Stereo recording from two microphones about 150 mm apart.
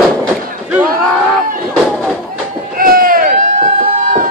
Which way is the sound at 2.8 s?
70° right (ahead or behind).